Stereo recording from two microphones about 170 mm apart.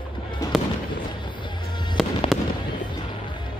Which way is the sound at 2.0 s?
Centre (ahead or behind).